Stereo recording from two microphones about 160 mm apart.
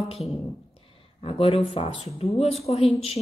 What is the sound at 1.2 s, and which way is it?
Speech, 35° left (ahead or behind).